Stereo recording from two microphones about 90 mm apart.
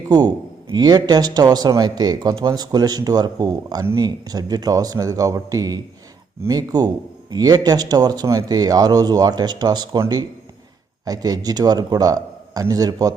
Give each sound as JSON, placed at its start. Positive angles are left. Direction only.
{"t": 0.7, "sound": "a man's voice", "side_deg": -50}
{"t": 11.0, "sound": "a man's voice", "side_deg": -45}